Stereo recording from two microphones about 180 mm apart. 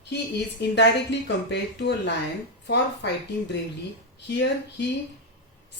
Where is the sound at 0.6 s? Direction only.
75° left (ahead or behind).